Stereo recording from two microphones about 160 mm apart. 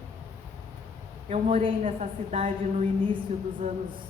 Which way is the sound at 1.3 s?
40° right (ahead or behind).